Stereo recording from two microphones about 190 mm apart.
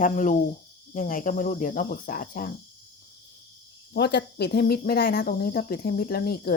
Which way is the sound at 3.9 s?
60° left (ahead or behind).